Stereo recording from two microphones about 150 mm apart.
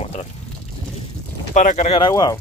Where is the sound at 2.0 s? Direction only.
25° left (ahead or behind).